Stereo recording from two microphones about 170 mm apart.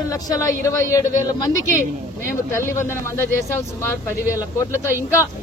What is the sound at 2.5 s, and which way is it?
Speech, 15° left (ahead or behind).